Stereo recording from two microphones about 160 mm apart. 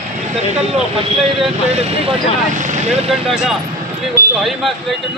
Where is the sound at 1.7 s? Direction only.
40° right (ahead or behind).